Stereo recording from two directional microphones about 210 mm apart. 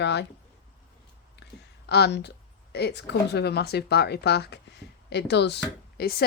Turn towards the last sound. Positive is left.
turn(degrees=50)  # may be behind; listen again after turning